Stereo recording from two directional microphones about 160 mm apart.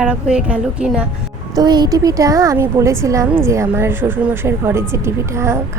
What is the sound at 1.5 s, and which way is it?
A woman's voice, 25° right (ahead or behind).